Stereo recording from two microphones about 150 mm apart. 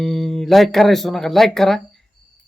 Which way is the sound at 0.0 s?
Centre (ahead or behind).